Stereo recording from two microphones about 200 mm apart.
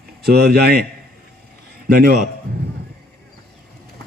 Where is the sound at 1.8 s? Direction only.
50° right (ahead or behind).